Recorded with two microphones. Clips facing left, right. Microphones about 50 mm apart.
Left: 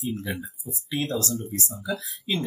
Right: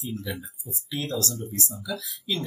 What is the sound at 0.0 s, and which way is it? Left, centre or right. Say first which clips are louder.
Speech: left 3 dB; left.